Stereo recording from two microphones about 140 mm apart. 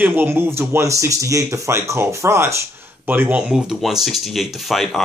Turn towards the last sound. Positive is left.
turn(degrees=0)  # may be behind; listen again after turning